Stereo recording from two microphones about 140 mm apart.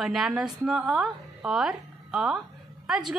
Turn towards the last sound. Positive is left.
turn(degrees=-5)  # may be behind; listen again after turning